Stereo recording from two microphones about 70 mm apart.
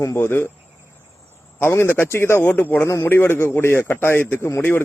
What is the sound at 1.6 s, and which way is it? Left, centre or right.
Speech, left.